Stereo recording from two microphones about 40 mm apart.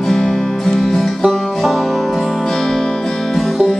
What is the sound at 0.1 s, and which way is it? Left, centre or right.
Music, centre.